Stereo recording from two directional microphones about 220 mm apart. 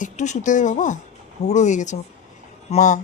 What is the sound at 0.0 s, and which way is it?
Speech, 35° left (ahead or behind).